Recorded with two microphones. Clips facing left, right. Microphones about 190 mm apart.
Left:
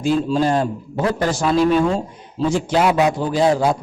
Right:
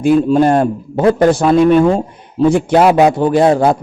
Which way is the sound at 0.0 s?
60° right (ahead or behind).